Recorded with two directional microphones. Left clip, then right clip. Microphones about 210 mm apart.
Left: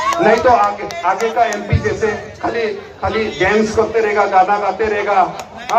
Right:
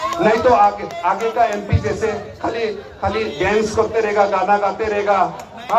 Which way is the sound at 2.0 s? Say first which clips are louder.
Left 3 dB; 25° right (ahead or behind).